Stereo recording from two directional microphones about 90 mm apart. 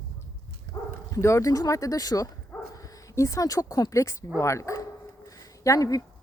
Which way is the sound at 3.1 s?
35° left (ahead or behind).